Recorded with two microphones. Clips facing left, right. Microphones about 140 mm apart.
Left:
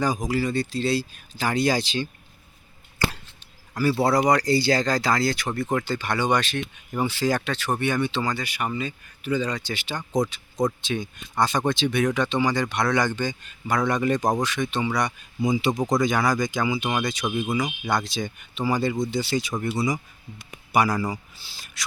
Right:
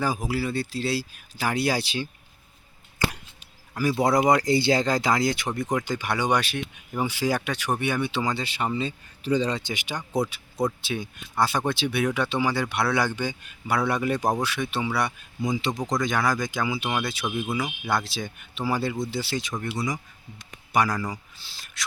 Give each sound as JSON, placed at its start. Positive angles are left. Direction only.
{"t": 0.0, "sound": "speech", "side_deg": -5}
{"t": 3.8, "sound": "speech", "side_deg": -15}
{"t": 8.3, "sound": "speech", "side_deg": -25}
{"t": 9.7, "sound": "speech", "side_deg": -10}